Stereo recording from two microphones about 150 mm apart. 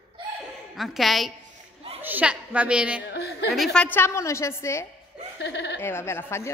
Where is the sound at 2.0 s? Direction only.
10° right (ahead or behind).